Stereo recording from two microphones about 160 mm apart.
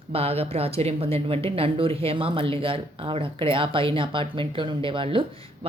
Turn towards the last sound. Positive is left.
turn(degrees=-30)  # may be behind; listen again after turning